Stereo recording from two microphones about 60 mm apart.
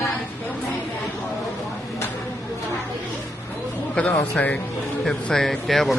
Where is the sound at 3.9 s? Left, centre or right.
Left.